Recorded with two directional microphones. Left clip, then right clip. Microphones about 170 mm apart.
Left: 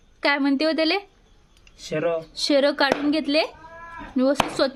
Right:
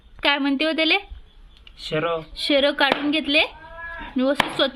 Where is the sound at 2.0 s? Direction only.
25° left (ahead or behind).